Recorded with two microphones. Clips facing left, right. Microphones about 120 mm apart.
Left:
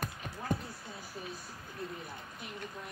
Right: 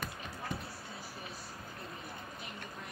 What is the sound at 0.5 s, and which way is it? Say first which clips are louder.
Basketball bounce: left 8 dB; 45° left (ahead or behind).